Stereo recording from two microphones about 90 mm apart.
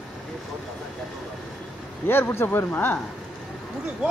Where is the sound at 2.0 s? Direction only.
25° left (ahead or behind).